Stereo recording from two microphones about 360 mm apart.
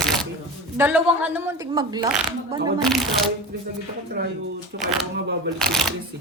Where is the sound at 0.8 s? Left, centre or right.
Centre.